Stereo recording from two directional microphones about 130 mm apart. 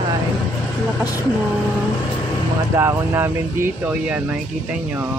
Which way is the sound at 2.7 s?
20° right (ahead or behind).